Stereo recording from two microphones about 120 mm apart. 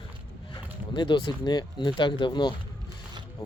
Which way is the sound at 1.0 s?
40° left (ahead or behind).